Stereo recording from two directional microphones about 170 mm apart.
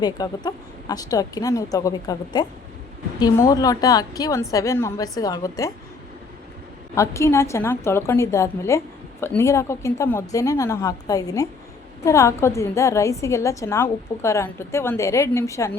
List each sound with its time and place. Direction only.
0.0 s a woman's voice: 25° left (ahead or behind)
6.9 s a woman's voice: 15° left (ahead or behind)